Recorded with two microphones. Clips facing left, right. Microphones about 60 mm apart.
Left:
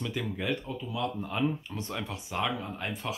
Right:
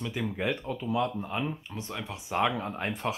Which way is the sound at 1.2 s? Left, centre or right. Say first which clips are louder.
Left 2 dB; centre.